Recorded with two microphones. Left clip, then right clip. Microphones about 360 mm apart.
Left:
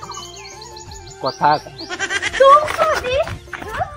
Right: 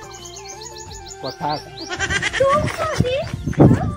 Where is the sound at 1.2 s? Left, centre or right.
Right.